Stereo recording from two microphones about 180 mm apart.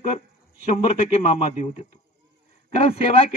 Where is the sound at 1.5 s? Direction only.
40° left (ahead or behind).